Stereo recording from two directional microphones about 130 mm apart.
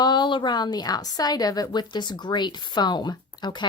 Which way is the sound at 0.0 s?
35° left (ahead or behind).